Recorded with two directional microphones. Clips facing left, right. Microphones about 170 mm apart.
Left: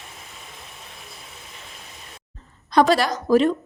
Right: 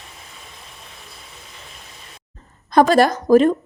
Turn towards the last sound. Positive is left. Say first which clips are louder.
# right 5 dB
turn(degrees=-45)  # may be behind; listen again after turning